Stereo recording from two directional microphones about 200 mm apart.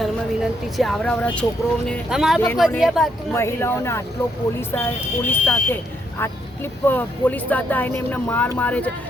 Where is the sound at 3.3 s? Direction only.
10° left (ahead or behind).